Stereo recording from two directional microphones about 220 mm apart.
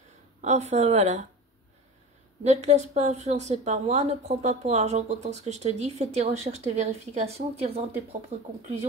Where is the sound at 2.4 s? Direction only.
30° right (ahead or behind).